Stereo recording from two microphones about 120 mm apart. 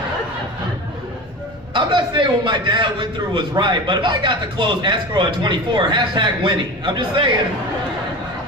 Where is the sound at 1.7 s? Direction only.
40° right (ahead or behind).